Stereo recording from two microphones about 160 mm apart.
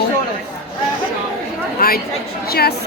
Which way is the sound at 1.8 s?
70° left (ahead or behind).